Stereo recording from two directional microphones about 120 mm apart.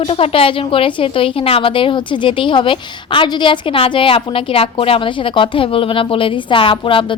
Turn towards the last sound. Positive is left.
turn(degrees=45)  # may be behind; listen again after turning